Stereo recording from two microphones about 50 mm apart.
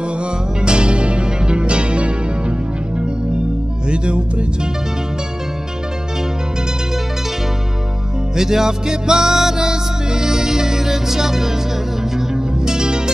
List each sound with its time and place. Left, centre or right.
0.2 s music: centre
3.9 s music: centre
8.4 s music: centre
12.5 s music: centre